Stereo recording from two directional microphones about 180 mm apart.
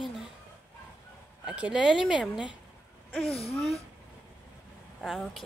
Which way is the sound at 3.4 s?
35° left (ahead or behind).